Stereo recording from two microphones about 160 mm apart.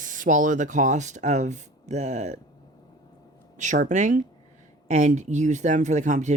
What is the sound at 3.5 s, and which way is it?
Speech, 50° right (ahead or behind).